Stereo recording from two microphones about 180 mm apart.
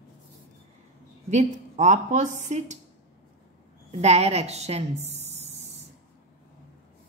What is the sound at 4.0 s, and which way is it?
Speech, 35° right (ahead or behind).